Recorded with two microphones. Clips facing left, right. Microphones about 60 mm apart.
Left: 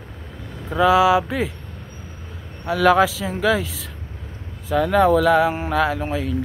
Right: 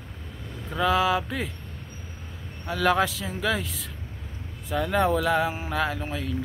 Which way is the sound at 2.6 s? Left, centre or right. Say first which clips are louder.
Left 7 dB; left.